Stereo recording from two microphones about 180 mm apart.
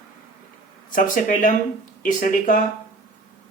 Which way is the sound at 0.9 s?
50° left (ahead or behind).